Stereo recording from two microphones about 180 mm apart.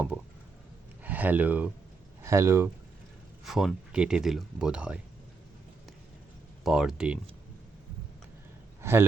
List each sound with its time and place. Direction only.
1.0 s speech: 10° right (ahead or behind)
3.4 s speech: centre (ahead or behind)
6.7 s speech: 5° right (ahead or behind)
8.8 s a man's voice: 15° right (ahead or behind)